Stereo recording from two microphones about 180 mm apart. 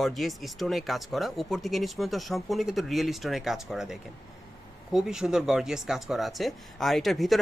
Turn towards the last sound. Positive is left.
turn(degrees=0)  # may be behind; listen again after turning